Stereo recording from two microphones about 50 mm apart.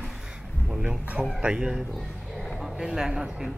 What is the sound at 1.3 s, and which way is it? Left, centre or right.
Speech, centre.